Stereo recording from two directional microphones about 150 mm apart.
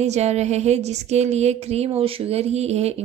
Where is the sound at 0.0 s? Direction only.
50° right (ahead or behind).